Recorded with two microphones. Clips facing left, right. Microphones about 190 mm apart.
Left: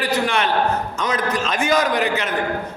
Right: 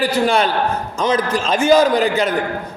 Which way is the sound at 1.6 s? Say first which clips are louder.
Right 7 dB; 30° right (ahead or behind).